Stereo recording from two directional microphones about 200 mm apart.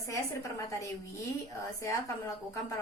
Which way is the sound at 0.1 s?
15° left (ahead or behind).